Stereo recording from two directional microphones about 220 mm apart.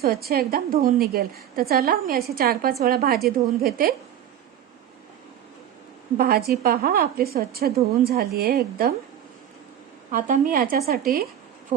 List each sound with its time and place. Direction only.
0.0 s a woman's voice: 45° right (ahead or behind)
6.1 s a woman's voice: 40° right (ahead or behind)
10.1 s a woman's voice: 40° right (ahead or behind)